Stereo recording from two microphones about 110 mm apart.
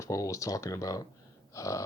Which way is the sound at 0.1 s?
30° left (ahead or behind).